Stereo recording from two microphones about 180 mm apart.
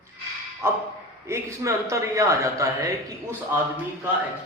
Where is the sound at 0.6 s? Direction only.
15° right (ahead or behind).